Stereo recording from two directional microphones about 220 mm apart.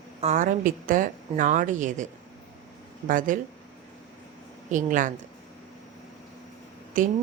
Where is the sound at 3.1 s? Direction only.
35° right (ahead or behind).